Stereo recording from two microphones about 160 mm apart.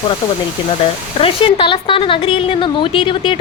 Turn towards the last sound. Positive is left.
turn(degrees=30)  # may be behind; listen again after turning